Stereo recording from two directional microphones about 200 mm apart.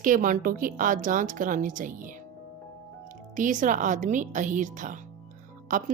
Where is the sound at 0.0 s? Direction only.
40° right (ahead or behind).